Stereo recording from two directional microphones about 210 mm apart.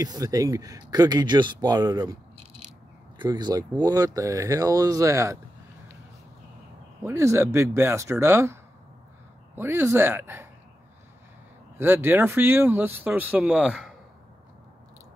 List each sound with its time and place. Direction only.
0.0 s speech: 15° right (ahead or behind)
3.2 s speech: 20° right (ahead or behind)
7.1 s speech: 10° right (ahead or behind)
9.6 s speech: 10° right (ahead or behind)
11.8 s speech: 10° right (ahead or behind)